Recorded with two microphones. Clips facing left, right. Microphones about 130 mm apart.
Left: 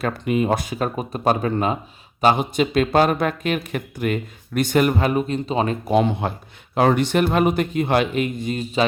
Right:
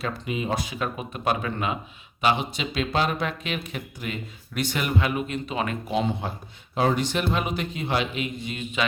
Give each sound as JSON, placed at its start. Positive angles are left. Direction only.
{"t": 0.0, "sound": "speech", "side_deg": 55}
{"t": 5.9, "sound": "speech", "side_deg": 60}